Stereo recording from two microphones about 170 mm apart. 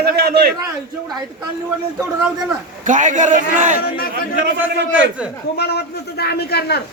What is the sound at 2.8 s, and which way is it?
Speech, 50° right (ahead or behind).